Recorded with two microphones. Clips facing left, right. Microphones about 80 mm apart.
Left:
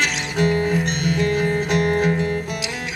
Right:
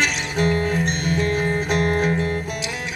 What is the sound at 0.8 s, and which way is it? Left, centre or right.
Music, right.